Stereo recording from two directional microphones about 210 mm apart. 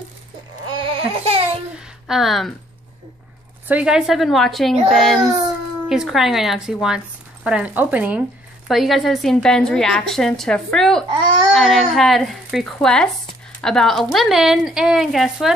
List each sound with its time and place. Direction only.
0.7 s a sound: 25° right (ahead or behind)
2.0 s a woman's voice: centre (ahead or behind)
3.6 s a woman's voice: 5° right (ahead or behind)